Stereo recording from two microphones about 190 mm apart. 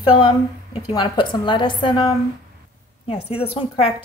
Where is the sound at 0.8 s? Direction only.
20° left (ahead or behind).